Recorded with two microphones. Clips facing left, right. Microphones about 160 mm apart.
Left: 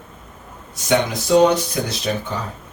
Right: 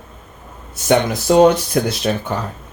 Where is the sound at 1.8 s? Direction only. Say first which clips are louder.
Right 6 dB; 60° right (ahead or behind).